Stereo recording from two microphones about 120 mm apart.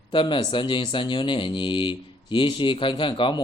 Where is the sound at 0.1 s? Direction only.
45° left (ahead or behind).